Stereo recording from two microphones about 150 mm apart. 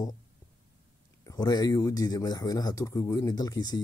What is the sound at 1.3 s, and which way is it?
Speech, 25° left (ahead or behind).